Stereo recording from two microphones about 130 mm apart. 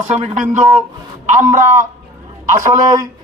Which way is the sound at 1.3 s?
80° right.